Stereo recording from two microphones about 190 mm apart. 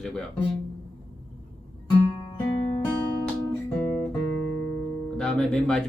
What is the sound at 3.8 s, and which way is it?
Guitar, 10° left (ahead or behind).